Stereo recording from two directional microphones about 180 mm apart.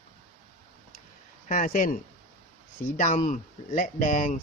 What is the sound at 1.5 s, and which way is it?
Speech, 50° left (ahead or behind).